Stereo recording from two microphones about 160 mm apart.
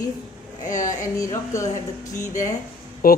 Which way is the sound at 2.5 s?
65° left (ahead or behind).